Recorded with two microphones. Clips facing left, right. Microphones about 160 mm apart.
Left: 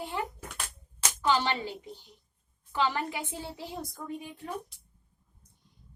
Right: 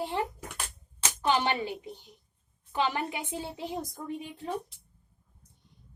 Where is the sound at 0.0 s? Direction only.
30° right (ahead or behind).